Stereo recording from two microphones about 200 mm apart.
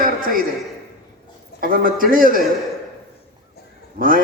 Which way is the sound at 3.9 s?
45° right (ahead or behind).